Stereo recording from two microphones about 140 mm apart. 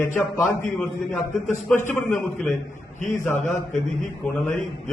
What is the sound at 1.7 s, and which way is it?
Speech, 15° left (ahead or behind).